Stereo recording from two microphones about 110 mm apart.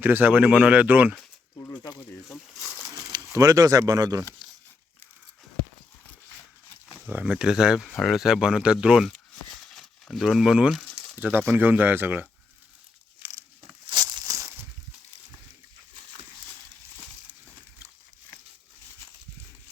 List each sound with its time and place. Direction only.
0.0 s speech: 15° right (ahead or behind)
1.5 s a sound: 35° left (ahead or behind)
2.9 s speech: 30° right (ahead or behind)
7.0 s speech: 10° right (ahead or behind)
11.2 s speech: 20° right (ahead or behind)
13.9 s a sound: 40° right (ahead or behind)